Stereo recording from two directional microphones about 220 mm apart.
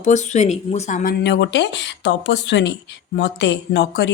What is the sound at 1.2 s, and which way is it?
A woman's voice, 50° left (ahead or behind).